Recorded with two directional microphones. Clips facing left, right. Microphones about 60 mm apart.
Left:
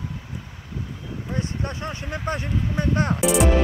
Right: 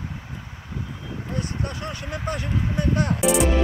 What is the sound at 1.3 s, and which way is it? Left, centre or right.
Speech, left.